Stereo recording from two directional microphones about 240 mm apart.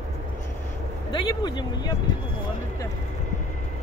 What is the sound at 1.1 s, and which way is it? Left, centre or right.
Speech, centre.